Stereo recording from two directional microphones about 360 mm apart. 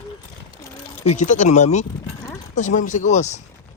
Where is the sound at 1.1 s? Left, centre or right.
Left.